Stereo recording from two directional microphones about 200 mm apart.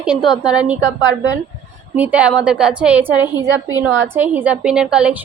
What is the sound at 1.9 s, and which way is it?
A woman's voice, 5° right (ahead or behind).